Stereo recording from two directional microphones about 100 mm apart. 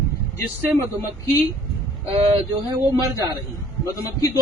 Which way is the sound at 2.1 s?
85° right.